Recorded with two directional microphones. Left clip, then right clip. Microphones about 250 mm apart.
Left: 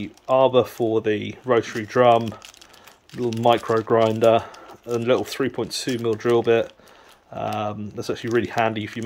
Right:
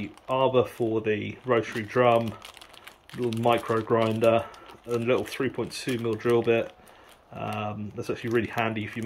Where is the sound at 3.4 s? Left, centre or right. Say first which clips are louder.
Left 6 dB; left.